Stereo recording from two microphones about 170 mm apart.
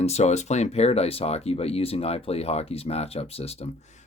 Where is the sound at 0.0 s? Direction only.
40° left (ahead or behind).